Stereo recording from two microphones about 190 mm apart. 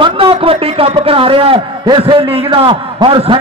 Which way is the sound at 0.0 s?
30° right (ahead or behind).